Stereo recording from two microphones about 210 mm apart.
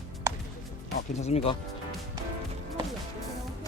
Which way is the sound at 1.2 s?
30° left (ahead or behind).